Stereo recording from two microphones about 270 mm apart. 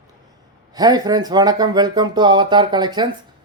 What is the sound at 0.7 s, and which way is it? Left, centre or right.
Speech, centre.